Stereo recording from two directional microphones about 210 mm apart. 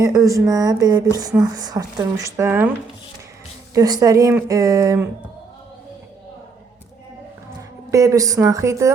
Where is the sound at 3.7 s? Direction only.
15° right (ahead or behind).